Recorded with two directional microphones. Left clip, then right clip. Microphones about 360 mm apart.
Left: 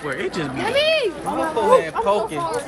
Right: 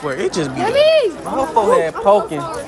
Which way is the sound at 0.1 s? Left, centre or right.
Centre.